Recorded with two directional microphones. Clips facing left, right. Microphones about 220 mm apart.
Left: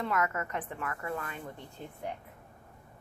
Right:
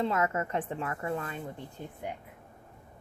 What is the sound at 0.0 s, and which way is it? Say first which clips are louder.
Speech: right 3 dB; 25° right (ahead or behind).